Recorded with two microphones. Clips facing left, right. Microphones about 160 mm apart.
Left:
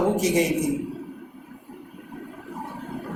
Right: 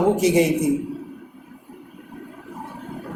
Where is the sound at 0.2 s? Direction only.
30° right (ahead or behind).